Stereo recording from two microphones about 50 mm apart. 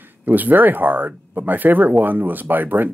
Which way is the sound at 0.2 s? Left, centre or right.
Right.